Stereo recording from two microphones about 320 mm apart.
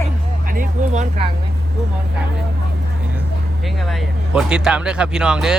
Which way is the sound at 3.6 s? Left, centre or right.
Centre.